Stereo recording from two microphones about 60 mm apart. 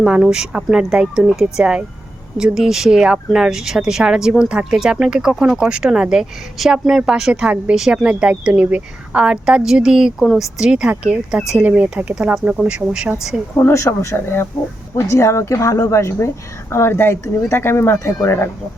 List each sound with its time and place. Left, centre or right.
0.0 s speech: centre
12.1 s speech: centre
13.6 s speech: left
13.8 s a woman's voice: left
16.7 s speech: left